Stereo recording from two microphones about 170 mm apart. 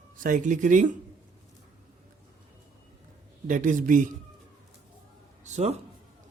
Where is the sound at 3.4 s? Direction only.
50° right (ahead or behind).